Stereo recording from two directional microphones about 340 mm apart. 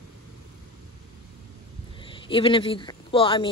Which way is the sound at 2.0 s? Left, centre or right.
Centre.